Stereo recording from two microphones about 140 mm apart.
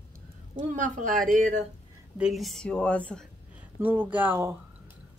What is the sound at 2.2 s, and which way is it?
Speech, centre (ahead or behind).